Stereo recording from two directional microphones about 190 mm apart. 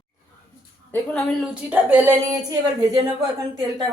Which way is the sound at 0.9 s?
5° left (ahead or behind).